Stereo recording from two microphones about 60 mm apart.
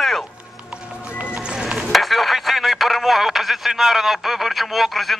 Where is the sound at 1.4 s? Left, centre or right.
Centre.